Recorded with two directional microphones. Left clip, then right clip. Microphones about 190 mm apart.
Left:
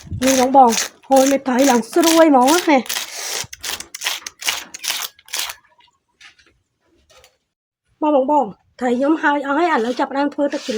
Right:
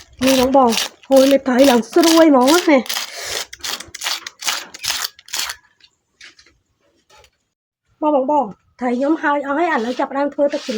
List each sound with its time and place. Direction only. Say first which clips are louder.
0.2 s speech: left 1 dB; 20° left (ahead or behind)
2.4 s tearing: right 1 dB; 15° left (ahead or behind)
5.2 s a sound: right 1 dB; 15° left (ahead or behind)
7.9 s a woman's voice: even; 40° left (ahead or behind)